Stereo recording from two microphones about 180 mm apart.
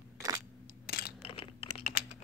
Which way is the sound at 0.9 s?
60° left (ahead or behind).